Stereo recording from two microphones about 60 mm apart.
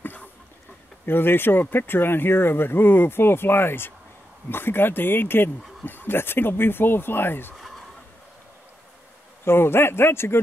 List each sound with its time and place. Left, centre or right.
0.0 s a sound: left
1.0 s speech: left
9.4 s speech: left